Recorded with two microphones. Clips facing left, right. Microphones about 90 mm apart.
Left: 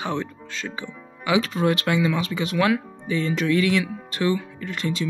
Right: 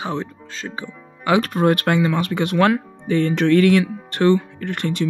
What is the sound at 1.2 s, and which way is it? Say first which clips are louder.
Speech: right 4 dB; 50° right (ahead or behind).